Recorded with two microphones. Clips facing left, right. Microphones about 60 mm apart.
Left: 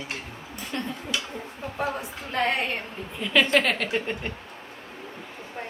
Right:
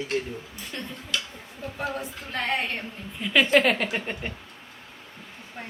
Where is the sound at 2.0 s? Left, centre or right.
Centre.